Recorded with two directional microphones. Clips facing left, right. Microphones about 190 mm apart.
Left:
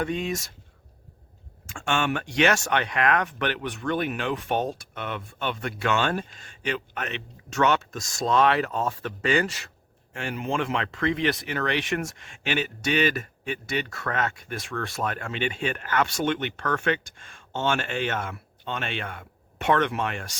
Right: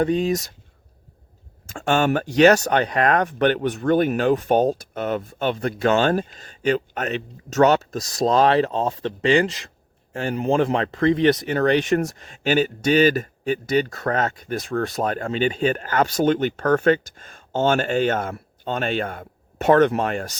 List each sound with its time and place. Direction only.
0.0 s speech: 35° right (ahead or behind)
1.6 s speech: 40° right (ahead or behind)